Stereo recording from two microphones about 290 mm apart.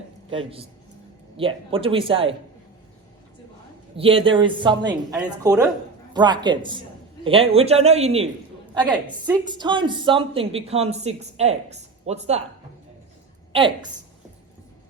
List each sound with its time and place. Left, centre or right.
0.3 s a woman's voice: centre
3.9 s a woman's voice: centre
8.7 s a woman's voice: centre
13.5 s a woman's voice: centre